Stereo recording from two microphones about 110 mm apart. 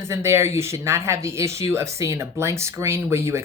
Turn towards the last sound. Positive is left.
turn(degrees=-25)  # may be behind; listen again after turning